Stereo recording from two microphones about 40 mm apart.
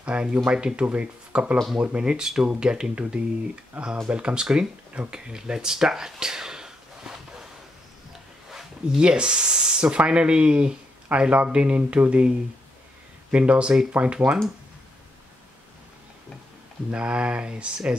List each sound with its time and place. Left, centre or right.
0.0 s speech: right
3.8 s speech: right
4.1 s speech: right
5.1 s a sound: centre
8.5 s a sound: centre
9.0 s speech: right
11.1 s speech: right
16.9 s speech: right